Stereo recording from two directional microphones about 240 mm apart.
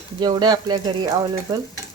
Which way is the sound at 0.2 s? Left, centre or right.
Centre.